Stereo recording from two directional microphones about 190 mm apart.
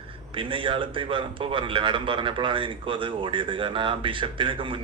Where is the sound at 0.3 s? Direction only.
25° right (ahead or behind).